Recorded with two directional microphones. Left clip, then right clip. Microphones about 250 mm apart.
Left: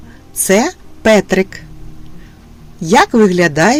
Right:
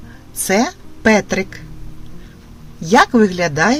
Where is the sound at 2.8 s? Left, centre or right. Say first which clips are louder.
Left 2 dB; left.